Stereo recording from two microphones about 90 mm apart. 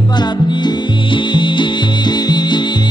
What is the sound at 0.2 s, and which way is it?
Music, 55° left (ahead or behind).